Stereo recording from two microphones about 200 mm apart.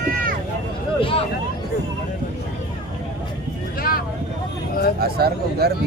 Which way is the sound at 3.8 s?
45° left (ahead or behind).